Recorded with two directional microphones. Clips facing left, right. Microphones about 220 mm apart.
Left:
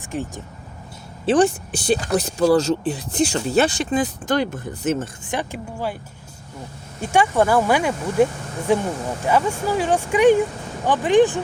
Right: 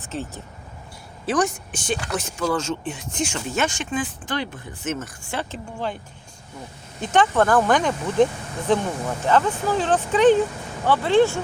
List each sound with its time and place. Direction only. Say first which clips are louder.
0.0 s speech: left 3 dB; 15° left (ahead or behind)
1.3 s speech: left 6 dB; 30° left (ahead or behind)
5.2 s speech: left 3 dB; 15° left (ahead or behind)
7.0 s speech: left 1 dB; 10° left (ahead or behind)